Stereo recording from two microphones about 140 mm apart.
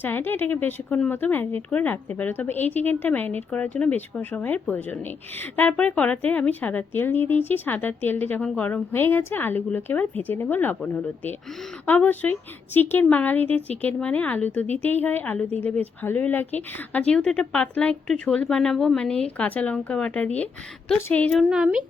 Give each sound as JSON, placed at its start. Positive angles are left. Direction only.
{"t": 0.0, "sound": "speech", "side_deg": 15}
{"t": 21.5, "sound": "a woman's voice", "side_deg": -5}